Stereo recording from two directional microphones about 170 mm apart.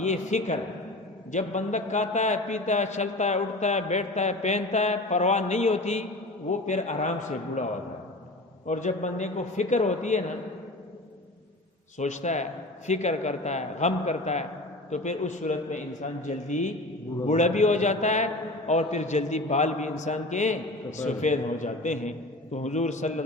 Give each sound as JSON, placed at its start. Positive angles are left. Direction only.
{"t": 0.0, "sound": "a man's voice", "side_deg": 45}
{"t": 8.6, "sound": "a man's voice", "side_deg": 45}
{"t": 11.9, "sound": "a man's voice", "side_deg": 45}